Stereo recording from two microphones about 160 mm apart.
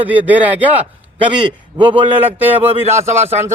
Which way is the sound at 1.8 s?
35° right (ahead or behind).